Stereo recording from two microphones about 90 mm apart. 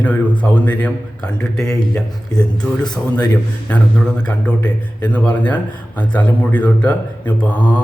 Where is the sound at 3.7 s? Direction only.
15° left (ahead or behind).